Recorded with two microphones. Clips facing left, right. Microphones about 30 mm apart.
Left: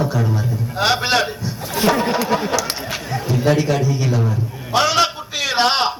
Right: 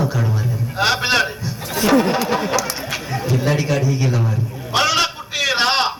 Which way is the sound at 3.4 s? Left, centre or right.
Centre.